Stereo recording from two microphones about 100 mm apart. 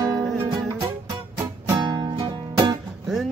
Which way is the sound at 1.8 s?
45° right (ahead or behind).